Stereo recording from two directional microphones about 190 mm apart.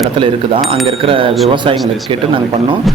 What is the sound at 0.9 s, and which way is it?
A man's voice, 30° right (ahead or behind).